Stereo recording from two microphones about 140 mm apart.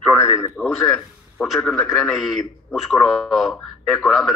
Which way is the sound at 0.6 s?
Centre (ahead or behind).